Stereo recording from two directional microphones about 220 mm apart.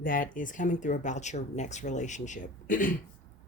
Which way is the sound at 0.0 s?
40° left (ahead or behind).